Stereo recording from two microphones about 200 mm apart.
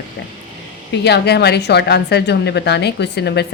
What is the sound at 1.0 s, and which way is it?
A woman's voice, 55° left (ahead or behind).